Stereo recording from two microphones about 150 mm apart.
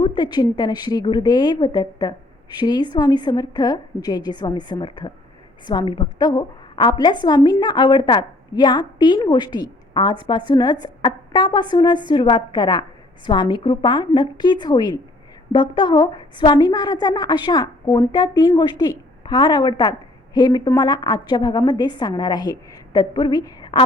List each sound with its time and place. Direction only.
0.0 s a woman's voice: 30° left (ahead or behind)